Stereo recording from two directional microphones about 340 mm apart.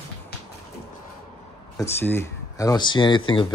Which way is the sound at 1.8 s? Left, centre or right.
Centre.